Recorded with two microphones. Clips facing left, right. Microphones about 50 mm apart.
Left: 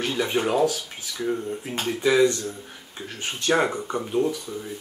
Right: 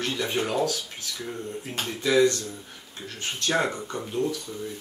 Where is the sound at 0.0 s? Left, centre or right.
Centre.